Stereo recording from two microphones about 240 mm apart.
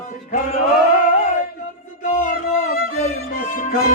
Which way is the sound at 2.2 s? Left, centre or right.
Left.